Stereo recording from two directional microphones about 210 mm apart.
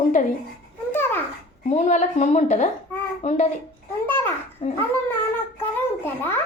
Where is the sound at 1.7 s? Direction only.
35° left (ahead or behind).